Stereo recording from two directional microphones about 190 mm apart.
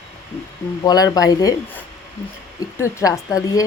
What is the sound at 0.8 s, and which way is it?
Speech, 20° left (ahead or behind).